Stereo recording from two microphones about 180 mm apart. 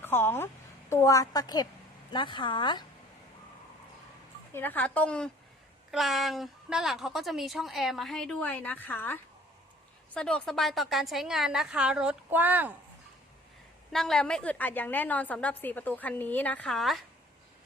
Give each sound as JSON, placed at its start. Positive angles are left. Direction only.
{"t": 0.0, "sound": "a woman's voice", "side_deg": 10}
{"t": 4.5, "sound": "a woman's voice", "side_deg": 10}
{"t": 10.2, "sound": "a woman's voice", "side_deg": 5}
{"t": 13.9, "sound": "a woman's voice", "side_deg": 5}